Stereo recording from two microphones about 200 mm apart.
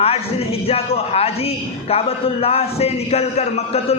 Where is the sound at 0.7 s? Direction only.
30° left (ahead or behind).